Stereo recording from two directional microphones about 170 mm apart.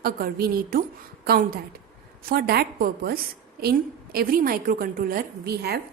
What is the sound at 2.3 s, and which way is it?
A woman's voice, 65° right (ahead or behind).